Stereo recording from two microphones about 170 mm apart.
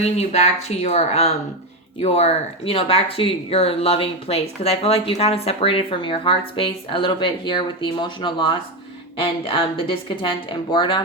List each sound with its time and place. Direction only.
0.0 s speech: 40° left (ahead or behind)